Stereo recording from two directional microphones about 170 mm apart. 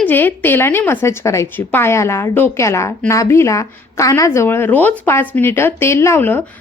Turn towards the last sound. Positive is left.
turn(degrees=10)  # may be behind; listen again after turning